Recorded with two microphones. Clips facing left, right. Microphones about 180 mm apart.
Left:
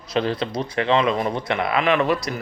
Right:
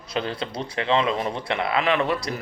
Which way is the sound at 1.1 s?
35° left (ahead or behind).